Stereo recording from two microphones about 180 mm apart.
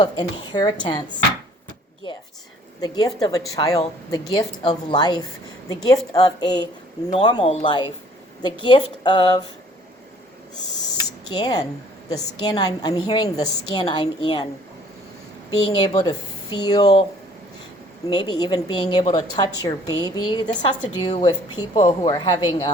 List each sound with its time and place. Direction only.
0.0 s a woman's voice: 25° left (ahead or behind)
2.8 s a woman's voice: 20° left (ahead or behind)
11.3 s a woman's voice: 20° left (ahead or behind)
15.5 s a woman's voice: 25° left (ahead or behind)
18.1 s a woman's voice: 25° left (ahead or behind)